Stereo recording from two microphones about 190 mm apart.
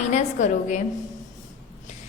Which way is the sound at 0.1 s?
40° left (ahead or behind).